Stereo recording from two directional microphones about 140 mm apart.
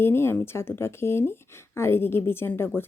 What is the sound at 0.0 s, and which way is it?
Speech, 15° left (ahead or behind).